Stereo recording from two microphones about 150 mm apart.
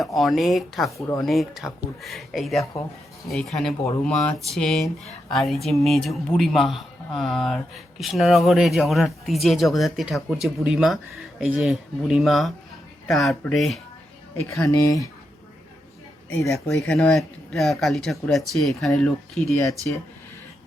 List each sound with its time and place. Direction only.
0.0 s a man's voice: centre (ahead or behind)
0.9 s speech: 20° left (ahead or behind)
1.2 s a man's voice: centre (ahead or behind)
14.4 s speech: 20° left (ahead or behind)
16.5 s a man's voice: centre (ahead or behind)